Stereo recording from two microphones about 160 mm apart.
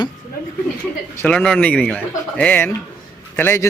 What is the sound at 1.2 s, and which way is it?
Speech, 5° left (ahead or behind).